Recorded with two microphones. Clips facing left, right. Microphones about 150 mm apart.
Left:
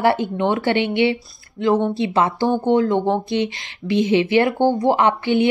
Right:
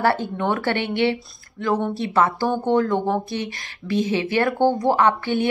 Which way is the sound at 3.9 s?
40° right (ahead or behind).